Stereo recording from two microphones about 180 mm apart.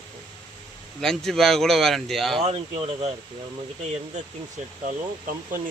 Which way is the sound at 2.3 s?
30° right (ahead or behind).